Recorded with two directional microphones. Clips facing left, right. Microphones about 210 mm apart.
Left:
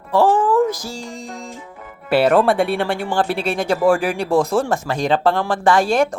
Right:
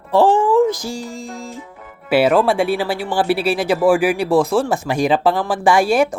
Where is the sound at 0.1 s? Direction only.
25° right (ahead or behind).